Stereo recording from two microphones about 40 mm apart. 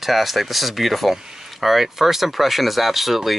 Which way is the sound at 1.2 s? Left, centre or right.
Centre.